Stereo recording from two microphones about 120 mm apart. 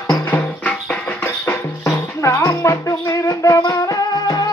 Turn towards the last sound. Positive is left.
turn(degrees=30)  # may be behind; listen again after turning